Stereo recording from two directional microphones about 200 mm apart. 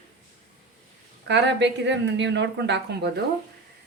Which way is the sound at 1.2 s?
60° right (ahead or behind).